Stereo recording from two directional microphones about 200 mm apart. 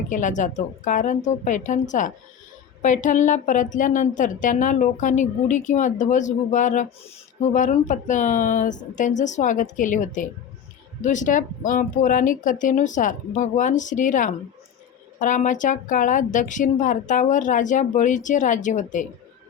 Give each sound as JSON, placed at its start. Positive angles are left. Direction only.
{"t": 0.1, "sound": "a woman's voice", "side_deg": 40}